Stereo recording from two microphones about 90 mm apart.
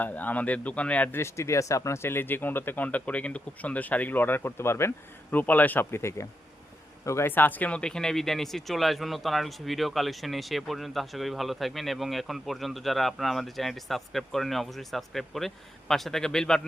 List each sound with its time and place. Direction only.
0.0 s a man's voice: 20° left (ahead or behind)
1.2 s speech: 35° left (ahead or behind); by 16.6 s 5° left (ahead or behind)